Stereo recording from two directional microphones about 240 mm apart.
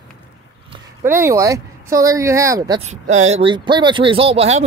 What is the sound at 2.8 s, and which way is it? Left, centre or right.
Speech, right.